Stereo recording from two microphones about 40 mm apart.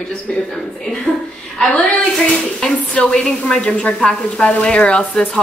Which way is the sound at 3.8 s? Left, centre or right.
Left.